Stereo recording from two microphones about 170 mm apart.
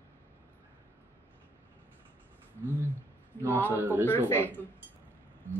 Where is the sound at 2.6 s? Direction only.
15° right (ahead or behind).